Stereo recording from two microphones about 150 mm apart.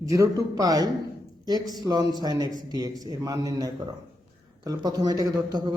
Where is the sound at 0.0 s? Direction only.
20° right (ahead or behind).